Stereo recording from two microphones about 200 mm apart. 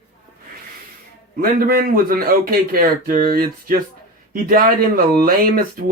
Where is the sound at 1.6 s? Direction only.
50° right (ahead or behind).